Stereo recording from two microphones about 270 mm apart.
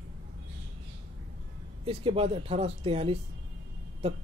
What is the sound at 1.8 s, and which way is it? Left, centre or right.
Speech, right.